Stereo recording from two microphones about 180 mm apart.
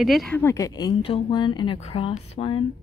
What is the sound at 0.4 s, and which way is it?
Speech, 15° left (ahead or behind).